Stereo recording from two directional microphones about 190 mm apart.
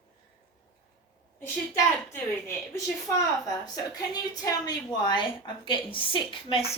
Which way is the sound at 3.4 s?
20° left (ahead or behind).